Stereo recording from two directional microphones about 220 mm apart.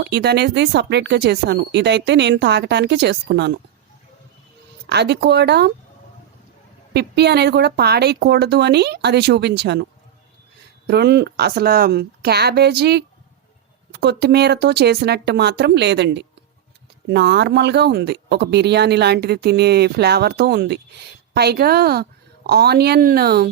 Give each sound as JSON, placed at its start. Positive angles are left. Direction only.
{"t": 0.0, "sound": "speech", "side_deg": -50}
{"t": 4.9, "sound": "speech", "side_deg": -50}
{"t": 6.9, "sound": "speech", "side_deg": -50}
{"t": 10.8, "sound": "speech", "side_deg": -50}